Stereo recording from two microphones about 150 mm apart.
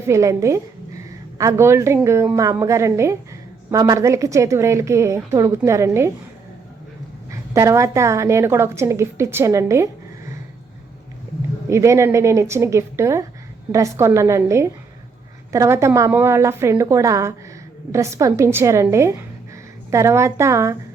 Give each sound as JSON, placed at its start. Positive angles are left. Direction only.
{"t": 0.1, "sound": "a woman's voice", "side_deg": -20}
{"t": 7.3, "sound": "a woman's voice", "side_deg": -20}
{"t": 11.7, "sound": "a woman's voice", "side_deg": -20}